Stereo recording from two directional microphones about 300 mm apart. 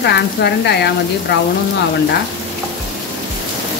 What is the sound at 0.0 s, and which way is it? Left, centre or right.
Speech, left.